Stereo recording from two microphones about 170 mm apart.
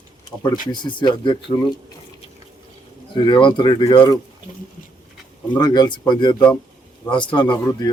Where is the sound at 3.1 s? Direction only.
30° left (ahead or behind).